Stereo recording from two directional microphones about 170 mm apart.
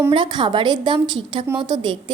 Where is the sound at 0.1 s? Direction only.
30° right (ahead or behind).